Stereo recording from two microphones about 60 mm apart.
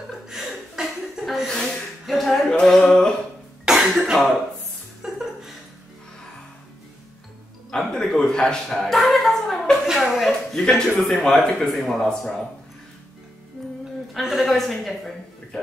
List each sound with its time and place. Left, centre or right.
0.3 s chuckle: centre
2.0 s music: centre
2.6 s a sound: centre
3.6 s cough: centre
5.0 s music: centre
7.7 s a man's voice: centre
9.8 s a sound: centre
10.5 s a man's voice: centre
14.1 s music: centre